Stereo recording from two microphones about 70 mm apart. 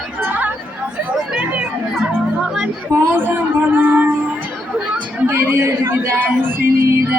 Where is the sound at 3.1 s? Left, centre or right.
Right.